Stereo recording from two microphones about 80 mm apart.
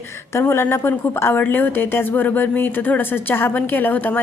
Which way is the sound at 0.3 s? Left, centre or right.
Left.